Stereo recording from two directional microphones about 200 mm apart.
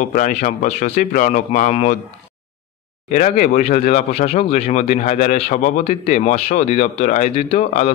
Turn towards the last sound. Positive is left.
turn(degrees=35)  # may be behind; listen again after turning